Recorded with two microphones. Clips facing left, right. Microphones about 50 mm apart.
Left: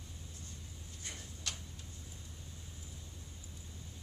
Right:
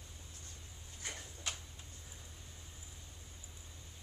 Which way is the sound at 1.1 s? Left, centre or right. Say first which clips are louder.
Left 1 dB; centre.